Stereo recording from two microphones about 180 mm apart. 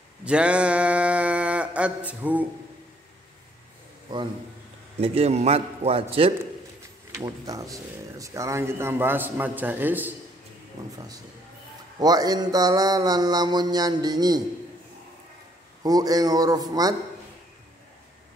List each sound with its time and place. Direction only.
0.2 s a sound: 5° right (ahead or behind)
4.1 s mantra: 25° right (ahead or behind)
4.9 s a man's voice: 35° right (ahead or behind)
7.2 s speech: 20° right (ahead or behind)
10.8 s mantra: 20° right (ahead or behind)
12.0 s mantra: 20° right (ahead or behind)
15.8 s mantra: 20° right (ahead or behind)